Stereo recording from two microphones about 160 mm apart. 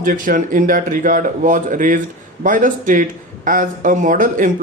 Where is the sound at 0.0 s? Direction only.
60° right (ahead or behind).